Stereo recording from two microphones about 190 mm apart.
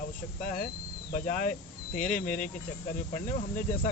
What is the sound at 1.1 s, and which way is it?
Cricket, 40° left (ahead or behind).